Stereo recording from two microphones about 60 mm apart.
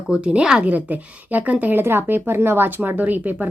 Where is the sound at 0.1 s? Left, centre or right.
Right.